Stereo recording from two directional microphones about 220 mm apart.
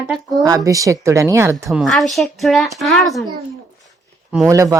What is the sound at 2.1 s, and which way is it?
Child singing, centre (ahead or behind).